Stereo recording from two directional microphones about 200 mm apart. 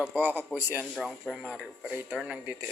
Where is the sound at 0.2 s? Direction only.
10° right (ahead or behind).